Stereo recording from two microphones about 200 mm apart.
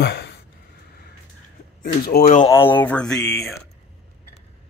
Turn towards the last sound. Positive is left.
turn(degrees=5)  # may be behind; listen again after turning